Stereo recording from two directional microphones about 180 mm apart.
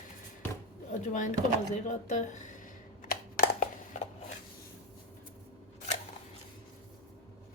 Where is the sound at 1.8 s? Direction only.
45° left (ahead or behind).